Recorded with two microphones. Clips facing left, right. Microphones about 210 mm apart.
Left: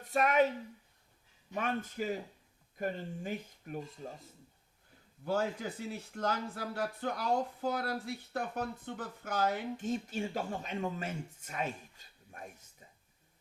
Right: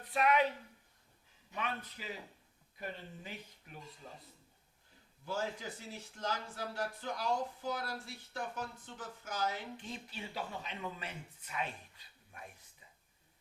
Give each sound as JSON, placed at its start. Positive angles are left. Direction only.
{"t": 0.0, "sound": "speech", "side_deg": 45}
{"t": 1.5, "sound": "speech", "side_deg": 45}
{"t": 5.2, "sound": "speech", "side_deg": 60}